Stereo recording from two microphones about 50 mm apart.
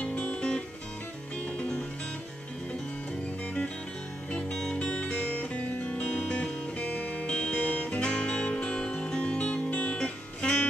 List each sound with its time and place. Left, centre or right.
0.2 s music: centre
4.3 s music: centre
4.8 s music: left
6.1 s music: centre